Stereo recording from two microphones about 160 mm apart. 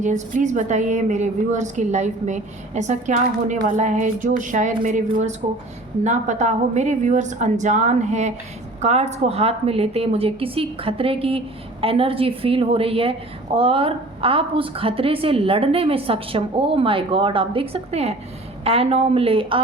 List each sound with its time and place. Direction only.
0.0 s a woman's voice: 50° right (ahead or behind); by 19.6 s 35° right (ahead or behind)